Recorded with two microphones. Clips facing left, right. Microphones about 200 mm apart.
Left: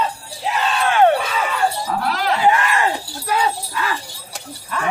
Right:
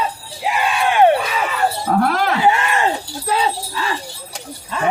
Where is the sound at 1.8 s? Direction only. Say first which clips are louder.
Right 4 dB; 55° right (ahead or behind).